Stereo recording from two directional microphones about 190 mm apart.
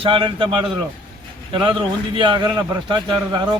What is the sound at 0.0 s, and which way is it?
Speech, 25° right (ahead or behind).